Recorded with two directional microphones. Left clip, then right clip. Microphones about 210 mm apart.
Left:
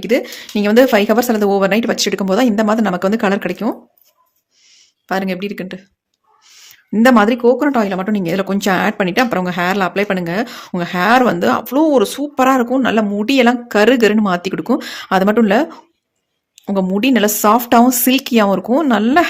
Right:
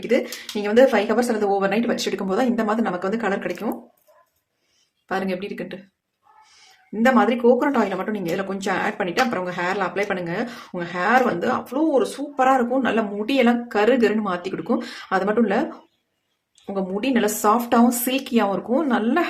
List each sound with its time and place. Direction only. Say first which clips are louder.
0.0 s speech: left 5 dB; 45° left (ahead or behind)
5.0 s speech: left 6 dB; 45° left (ahead or behind)
6.9 s speech: left 7 dB; 45° left (ahead or behind)